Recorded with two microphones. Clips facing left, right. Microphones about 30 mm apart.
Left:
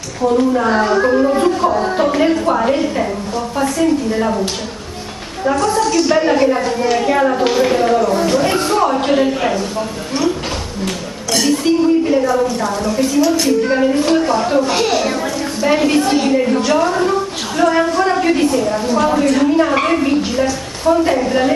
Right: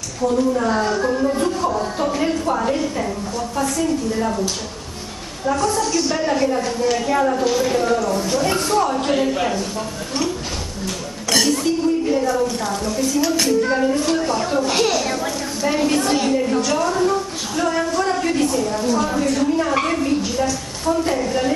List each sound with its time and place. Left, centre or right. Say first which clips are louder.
0.2 s a woman's voice: left 4 dB; left
8.3 s a woman's voice: left 4 dB; left
11.4 s a woman's voice: left 10 dB; left
15.6 s a woman's voice: left 5 dB; left
16.0 s a child's voice: left 4 dB; centre